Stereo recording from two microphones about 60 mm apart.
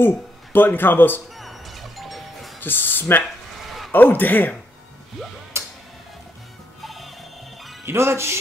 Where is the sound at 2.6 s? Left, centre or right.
Left.